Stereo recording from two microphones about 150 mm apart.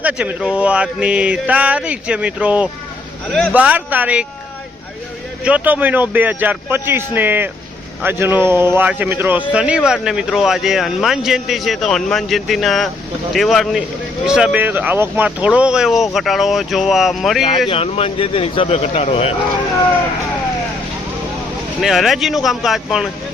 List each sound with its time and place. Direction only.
0.0 s speech: 10° right (ahead or behind)
5.4 s speech: 10° right (ahead or behind)
17.7 s speech: 40° left (ahead or behind)
21.8 s speech: centre (ahead or behind)